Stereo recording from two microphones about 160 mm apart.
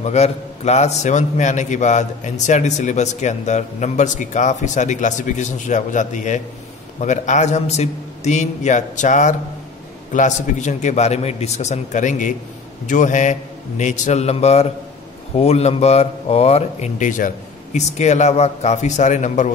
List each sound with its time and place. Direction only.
0.0 s a man's voice: 45° left (ahead or behind)